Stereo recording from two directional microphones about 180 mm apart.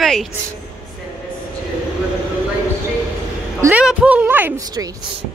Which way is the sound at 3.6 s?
5° right (ahead or behind).